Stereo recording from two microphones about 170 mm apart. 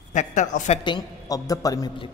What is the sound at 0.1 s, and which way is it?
Speech, 45° left (ahead or behind).